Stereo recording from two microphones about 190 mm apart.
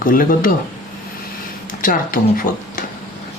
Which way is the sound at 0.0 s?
45° left (ahead or behind).